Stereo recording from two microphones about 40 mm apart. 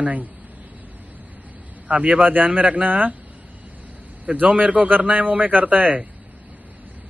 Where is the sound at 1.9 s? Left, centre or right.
Right.